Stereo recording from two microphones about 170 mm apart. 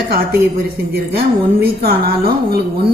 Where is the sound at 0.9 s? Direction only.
65° right (ahead or behind).